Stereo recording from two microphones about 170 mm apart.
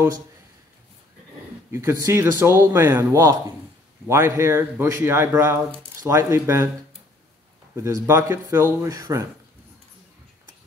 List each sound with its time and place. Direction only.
1.7 s a man's voice: 15° right (ahead or behind)
7.7 s a man's voice: 15° right (ahead or behind)